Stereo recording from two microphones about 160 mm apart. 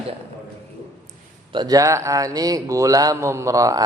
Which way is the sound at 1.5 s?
25° right (ahead or behind).